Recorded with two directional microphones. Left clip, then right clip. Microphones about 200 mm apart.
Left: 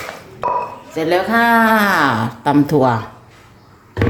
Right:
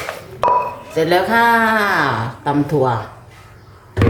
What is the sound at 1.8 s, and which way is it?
Speech, 50° left (ahead or behind).